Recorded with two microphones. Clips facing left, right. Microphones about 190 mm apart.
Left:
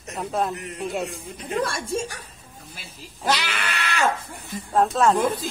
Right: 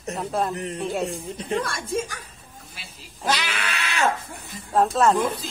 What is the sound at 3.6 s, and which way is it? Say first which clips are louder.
Speech: left 1 dB; 60° left (ahead or behind).